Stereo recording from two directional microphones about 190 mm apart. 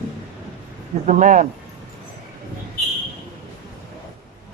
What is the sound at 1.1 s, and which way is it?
Speech, 40° right (ahead or behind).